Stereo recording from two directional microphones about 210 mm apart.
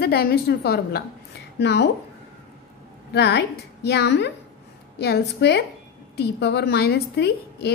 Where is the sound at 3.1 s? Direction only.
55° left (ahead or behind).